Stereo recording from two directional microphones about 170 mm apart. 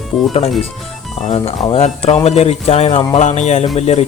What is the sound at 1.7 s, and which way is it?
A man's voice, 40° left (ahead or behind).